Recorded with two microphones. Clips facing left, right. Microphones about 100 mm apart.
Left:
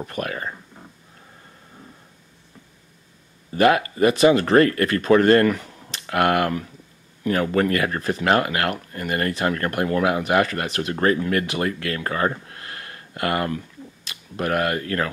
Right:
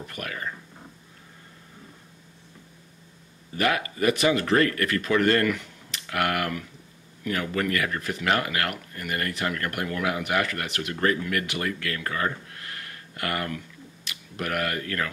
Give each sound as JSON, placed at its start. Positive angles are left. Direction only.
{"t": 0.0, "sound": "speech", "side_deg": 35}
{"t": 3.5, "sound": "speech", "side_deg": 35}